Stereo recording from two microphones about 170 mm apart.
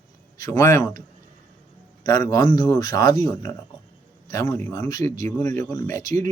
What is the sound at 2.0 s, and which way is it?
Speech, 20° left (ahead or behind).